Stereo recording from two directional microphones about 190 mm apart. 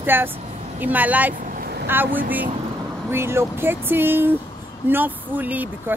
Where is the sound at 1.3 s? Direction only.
45° right (ahead or behind).